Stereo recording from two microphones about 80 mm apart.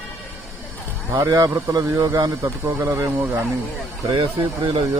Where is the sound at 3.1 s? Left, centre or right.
Right.